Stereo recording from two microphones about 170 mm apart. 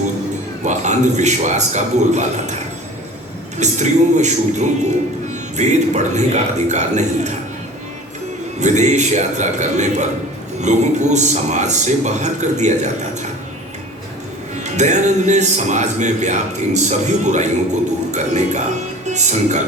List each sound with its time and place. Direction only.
0.6 s speech: 45° right (ahead or behind)
3.6 s speech: 45° right (ahead or behind)
8.6 s speech: 45° right (ahead or behind)
14.6 s speech: 45° right (ahead or behind)